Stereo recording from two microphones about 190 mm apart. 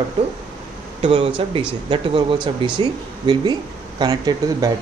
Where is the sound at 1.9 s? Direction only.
25° right (ahead or behind).